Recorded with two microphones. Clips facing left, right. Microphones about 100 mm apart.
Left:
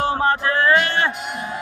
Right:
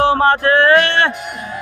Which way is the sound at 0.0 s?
70° right (ahead or behind).